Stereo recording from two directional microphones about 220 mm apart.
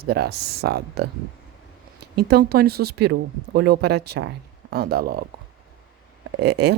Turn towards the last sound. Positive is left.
turn(degrees=-50)  # may be behind; listen again after turning